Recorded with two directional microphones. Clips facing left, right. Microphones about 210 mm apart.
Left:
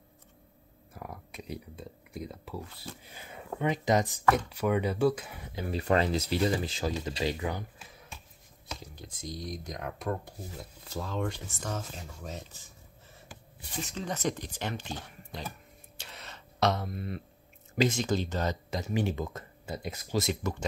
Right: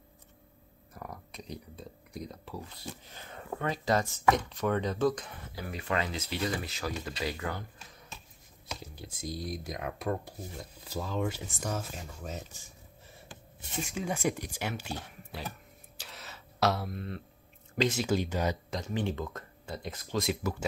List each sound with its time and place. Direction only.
0.9 s speech: 5° left (ahead or behind)
5.5 s speech: 20° left (ahead or behind)
5.8 s speech: 35° left (ahead or behind); by 7.6 s 20° left (ahead or behind)
7.9 s finger snapping: 5° left (ahead or behind)
8.6 s speech: 5° right (ahead or behind)
13.8 s speech: 10° right (ahead or behind)
16.0 s a sound: centre (ahead or behind)
17.7 s speech: 5° right (ahead or behind)
18.7 s speech: 5° left (ahead or behind)
20.2 s speech: 5° right (ahead or behind)